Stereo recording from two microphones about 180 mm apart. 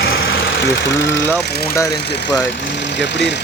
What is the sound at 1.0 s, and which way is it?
Speech, 75° left (ahead or behind).